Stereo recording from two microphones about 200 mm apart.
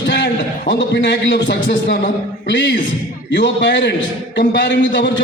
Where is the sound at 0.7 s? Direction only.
60° left (ahead or behind).